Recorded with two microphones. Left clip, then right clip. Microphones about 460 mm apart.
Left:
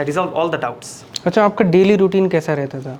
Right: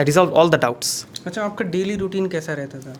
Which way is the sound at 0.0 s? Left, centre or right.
Right.